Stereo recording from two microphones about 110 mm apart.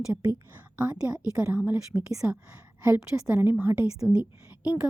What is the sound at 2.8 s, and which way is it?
A woman's voice, 25° right (ahead or behind).